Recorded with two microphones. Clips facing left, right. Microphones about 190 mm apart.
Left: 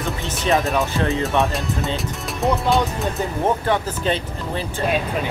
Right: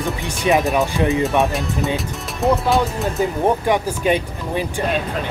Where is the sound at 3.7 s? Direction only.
15° right (ahead or behind).